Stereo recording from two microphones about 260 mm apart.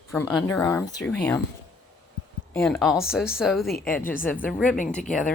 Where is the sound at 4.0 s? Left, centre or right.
Left.